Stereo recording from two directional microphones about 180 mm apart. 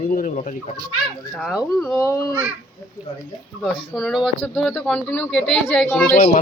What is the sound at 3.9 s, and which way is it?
Speech, centre (ahead or behind).